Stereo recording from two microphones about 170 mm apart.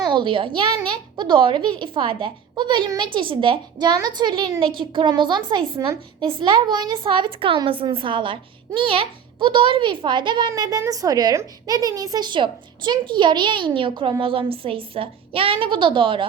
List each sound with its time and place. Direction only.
0.0 s a woman's voice: 25° right (ahead or behind)